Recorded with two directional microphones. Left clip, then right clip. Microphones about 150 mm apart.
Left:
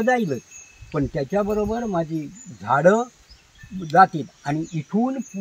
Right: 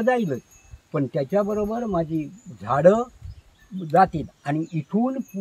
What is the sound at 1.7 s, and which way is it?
Speech, 35° right (ahead or behind).